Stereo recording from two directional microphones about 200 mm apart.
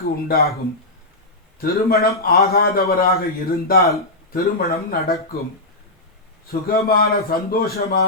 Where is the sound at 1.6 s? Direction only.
50° left (ahead or behind).